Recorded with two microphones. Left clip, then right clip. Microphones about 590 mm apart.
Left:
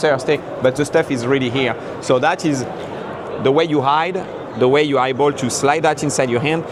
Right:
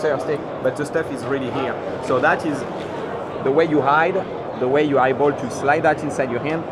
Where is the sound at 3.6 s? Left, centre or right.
Left.